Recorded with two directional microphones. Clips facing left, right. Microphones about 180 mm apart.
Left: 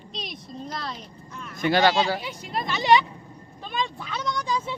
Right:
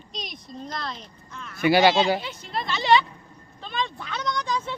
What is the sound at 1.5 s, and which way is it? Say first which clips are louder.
Speech: right 2 dB; 10° right (ahead or behind).